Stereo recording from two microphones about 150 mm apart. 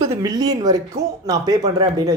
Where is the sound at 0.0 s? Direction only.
25° right (ahead or behind).